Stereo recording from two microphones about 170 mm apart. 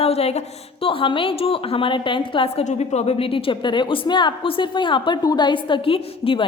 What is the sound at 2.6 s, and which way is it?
A woman's voice, 40° left (ahead or behind).